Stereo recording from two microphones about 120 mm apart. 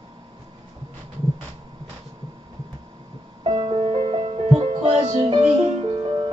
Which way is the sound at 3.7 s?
50° right (ahead or behind).